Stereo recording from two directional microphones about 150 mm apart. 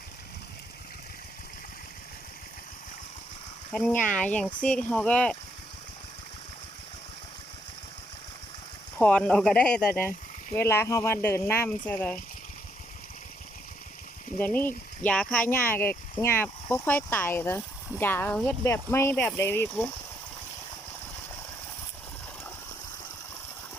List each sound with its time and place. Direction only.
3.7 s speech: 5° left (ahead or behind)
9.0 s speech: 5° left (ahead or behind)
14.3 s speech: 10° left (ahead or behind)